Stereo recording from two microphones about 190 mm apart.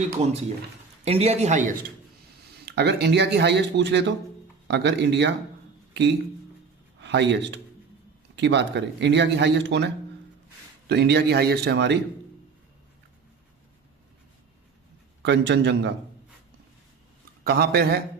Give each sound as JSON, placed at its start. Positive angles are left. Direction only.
{"t": 1.0, "sound": "a man's voice", "side_deg": -30}
{"t": 2.6, "sound": "a man's voice", "side_deg": -60}
{"t": 15.2, "sound": "speech", "side_deg": -70}
{"t": 17.4, "sound": "speech", "side_deg": -55}